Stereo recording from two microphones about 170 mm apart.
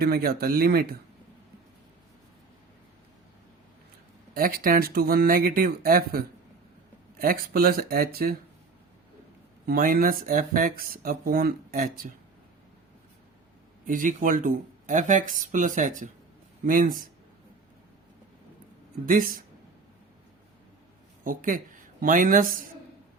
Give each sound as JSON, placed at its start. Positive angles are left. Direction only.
{"t": 0.0, "sound": "speech", "side_deg": -60}
{"t": 4.4, "sound": "speech", "side_deg": -60}
{"t": 9.6, "sound": "speech", "side_deg": -55}
{"t": 13.8, "sound": "speech", "side_deg": -50}
{"t": 19.0, "sound": "speech", "side_deg": -55}
{"t": 21.2, "sound": "speech", "side_deg": -55}